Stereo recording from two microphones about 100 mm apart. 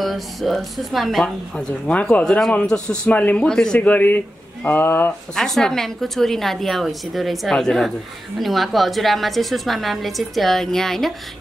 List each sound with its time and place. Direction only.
0.0 s a woman's voice: centre (ahead or behind)
2.2 s a woman's voice: 5° left (ahead or behind); by 5.1 s 20° left (ahead or behind)
5.3 s a woman's voice: 5° left (ahead or behind)